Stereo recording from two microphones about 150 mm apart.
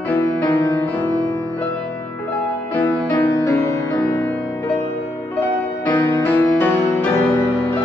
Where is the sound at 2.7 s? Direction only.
15° left (ahead or behind).